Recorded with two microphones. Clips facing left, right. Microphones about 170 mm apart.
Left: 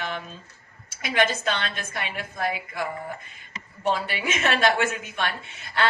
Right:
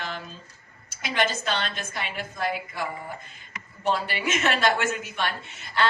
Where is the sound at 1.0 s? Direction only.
55° left (ahead or behind).